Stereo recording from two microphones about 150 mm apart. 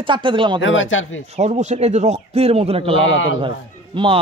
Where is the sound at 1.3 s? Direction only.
45° right (ahead or behind).